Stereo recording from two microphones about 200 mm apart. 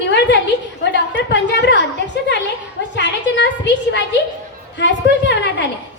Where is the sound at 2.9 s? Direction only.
60° left (ahead or behind).